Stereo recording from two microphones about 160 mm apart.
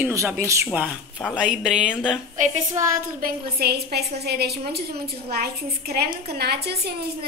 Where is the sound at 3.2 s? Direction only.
75° right (ahead or behind).